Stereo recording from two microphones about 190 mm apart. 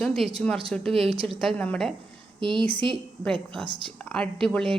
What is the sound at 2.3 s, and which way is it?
Speech, 25° right (ahead or behind).